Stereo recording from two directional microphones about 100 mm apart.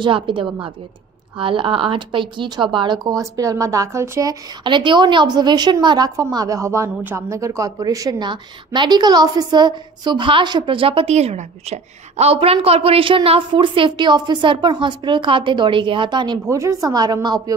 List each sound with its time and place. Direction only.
0.0 s a woman's voice: 60° right (ahead or behind); by 4.4 s 30° right (ahead or behind)
4.6 s a woman's voice: 50° right (ahead or behind)
16.4 s a woman's voice: 30° right (ahead or behind)